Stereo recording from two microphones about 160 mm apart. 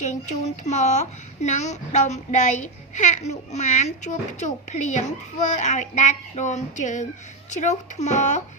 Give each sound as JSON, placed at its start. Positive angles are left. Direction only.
{"t": 0.0, "sound": "a child's voice", "side_deg": 45}